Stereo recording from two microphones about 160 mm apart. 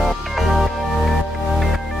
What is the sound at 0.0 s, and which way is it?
Music, centre (ahead or behind).